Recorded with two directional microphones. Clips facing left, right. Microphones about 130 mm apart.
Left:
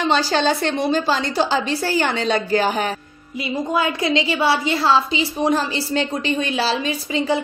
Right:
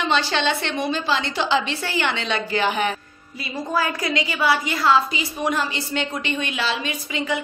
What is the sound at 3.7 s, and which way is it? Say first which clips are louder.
A woman's voice: left 3 dB; 25° left (ahead or behind).